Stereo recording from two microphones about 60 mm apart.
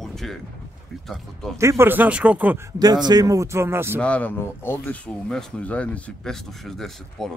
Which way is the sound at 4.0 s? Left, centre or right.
Left.